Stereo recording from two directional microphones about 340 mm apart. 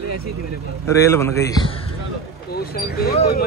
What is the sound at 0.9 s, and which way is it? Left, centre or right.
Speech, centre.